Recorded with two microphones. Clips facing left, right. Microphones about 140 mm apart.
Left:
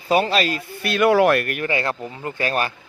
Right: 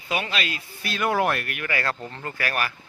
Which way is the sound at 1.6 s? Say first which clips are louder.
Left 5 dB; 20° left (ahead or behind).